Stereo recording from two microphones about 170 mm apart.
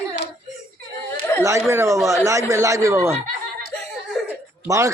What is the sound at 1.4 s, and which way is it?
Speech, 15° right (ahead or behind).